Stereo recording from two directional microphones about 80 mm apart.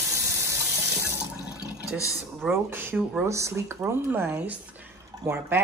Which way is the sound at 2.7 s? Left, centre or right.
Right.